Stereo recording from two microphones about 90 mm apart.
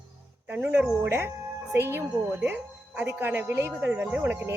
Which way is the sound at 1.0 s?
30° right (ahead or behind).